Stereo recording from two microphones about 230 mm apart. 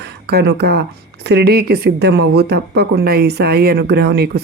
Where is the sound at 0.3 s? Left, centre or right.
Right.